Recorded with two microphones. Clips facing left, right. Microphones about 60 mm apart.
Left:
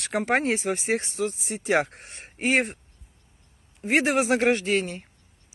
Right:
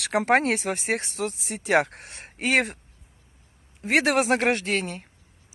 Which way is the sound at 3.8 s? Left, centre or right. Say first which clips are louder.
Right 1 dB; right.